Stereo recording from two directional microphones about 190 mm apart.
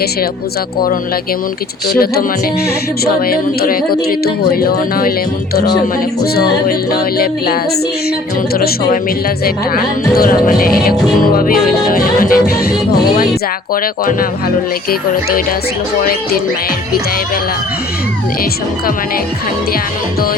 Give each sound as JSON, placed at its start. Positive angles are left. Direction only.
{"t": 1.9, "sound": "speech", "side_deg": 55}
{"t": 3.0, "sound": "music", "side_deg": 50}
{"t": 6.3, "sound": "music", "side_deg": 55}
{"t": 14.0, "sound": "music", "side_deg": 50}